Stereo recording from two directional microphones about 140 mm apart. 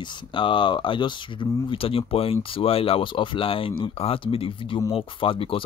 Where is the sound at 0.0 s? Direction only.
35° left (ahead or behind).